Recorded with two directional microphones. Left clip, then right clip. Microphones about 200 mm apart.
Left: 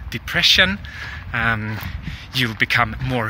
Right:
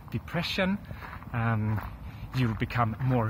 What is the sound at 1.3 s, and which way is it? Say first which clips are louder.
Speech: left 12 dB; 35° left (ahead or behind).